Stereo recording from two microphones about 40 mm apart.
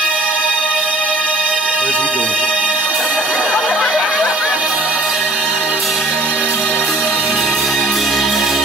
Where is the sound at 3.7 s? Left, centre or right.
Centre.